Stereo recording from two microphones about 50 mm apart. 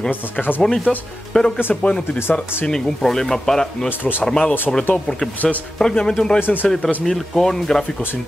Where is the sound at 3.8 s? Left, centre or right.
Left.